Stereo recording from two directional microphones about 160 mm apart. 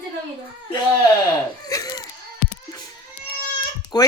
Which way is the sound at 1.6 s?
20° left (ahead or behind).